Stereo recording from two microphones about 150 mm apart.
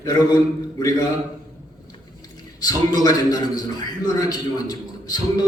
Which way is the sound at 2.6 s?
25° left (ahead or behind).